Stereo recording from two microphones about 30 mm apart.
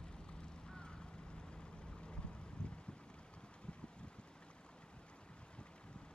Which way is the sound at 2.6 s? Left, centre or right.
Left.